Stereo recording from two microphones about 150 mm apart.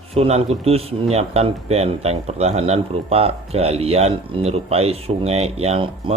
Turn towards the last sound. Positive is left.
turn(degrees=-40)  # may be behind; listen again after turning